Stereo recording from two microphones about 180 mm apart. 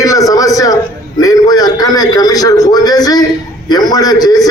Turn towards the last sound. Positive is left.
turn(degrees=20)  # may be behind; listen again after turning